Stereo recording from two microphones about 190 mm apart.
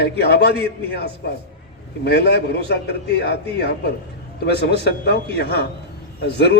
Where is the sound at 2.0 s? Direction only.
60° left (ahead or behind).